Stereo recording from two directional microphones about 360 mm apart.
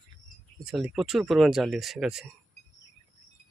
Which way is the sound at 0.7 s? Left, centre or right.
Centre.